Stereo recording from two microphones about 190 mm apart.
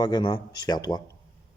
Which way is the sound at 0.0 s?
20° left (ahead or behind).